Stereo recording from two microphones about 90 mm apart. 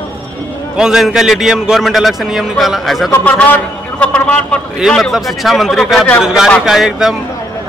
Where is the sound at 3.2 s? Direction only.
15° left (ahead or behind).